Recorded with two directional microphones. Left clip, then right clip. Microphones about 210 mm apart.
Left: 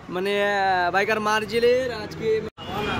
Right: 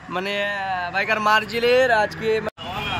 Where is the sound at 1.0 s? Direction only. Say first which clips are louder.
Right 4 dB; 5° left (ahead or behind).